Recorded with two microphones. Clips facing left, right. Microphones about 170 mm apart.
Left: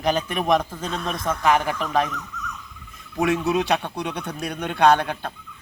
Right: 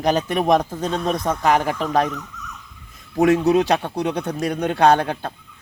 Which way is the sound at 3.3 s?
40° right (ahead or behind).